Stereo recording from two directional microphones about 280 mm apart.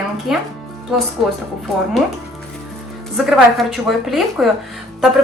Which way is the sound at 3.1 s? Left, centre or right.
Centre.